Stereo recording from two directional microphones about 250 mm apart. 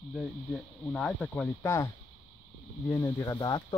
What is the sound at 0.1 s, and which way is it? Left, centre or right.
Speech, centre.